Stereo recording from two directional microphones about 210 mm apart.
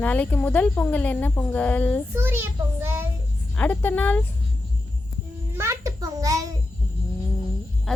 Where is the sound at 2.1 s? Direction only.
10° right (ahead or behind).